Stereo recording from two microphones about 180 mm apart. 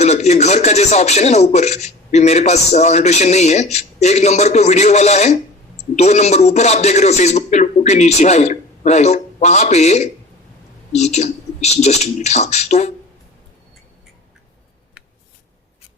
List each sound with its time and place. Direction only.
0.0 s speech: 40° left (ahead or behind)